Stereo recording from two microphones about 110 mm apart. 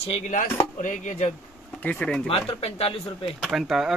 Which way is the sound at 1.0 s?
90° left.